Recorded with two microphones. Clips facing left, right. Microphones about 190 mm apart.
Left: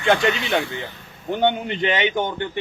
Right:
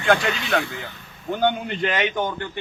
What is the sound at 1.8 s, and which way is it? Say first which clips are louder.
Speech: left 2 dB; 25° left (ahead or behind).